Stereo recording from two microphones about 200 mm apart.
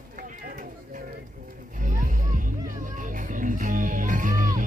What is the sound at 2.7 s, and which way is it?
Music, 40° right (ahead or behind).